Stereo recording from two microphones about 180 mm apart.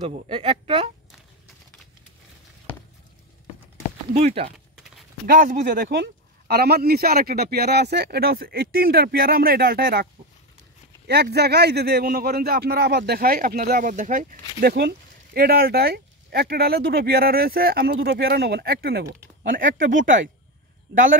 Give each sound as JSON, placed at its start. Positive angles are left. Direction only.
{"t": 0.1, "sound": "a woman's voice", "side_deg": -35}
{"t": 4.1, "sound": "speech", "side_deg": -35}
{"t": 4.7, "sound": "clip-clop", "side_deg": -5}
{"t": 5.2, "sound": "speech", "side_deg": -50}
{"t": 11.1, "sound": "speech", "side_deg": -65}
{"t": 19.6, "sound": "speech", "side_deg": -90}